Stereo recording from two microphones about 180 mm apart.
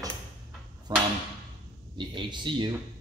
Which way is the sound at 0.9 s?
20° right (ahead or behind).